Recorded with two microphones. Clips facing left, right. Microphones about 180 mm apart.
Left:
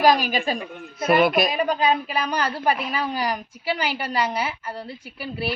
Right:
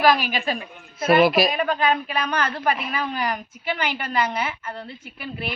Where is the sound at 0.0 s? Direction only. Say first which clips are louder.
Left 1 dB; 40° left (ahead or behind).